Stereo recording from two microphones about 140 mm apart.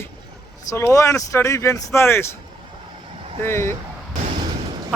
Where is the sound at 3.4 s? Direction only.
20° left (ahead or behind).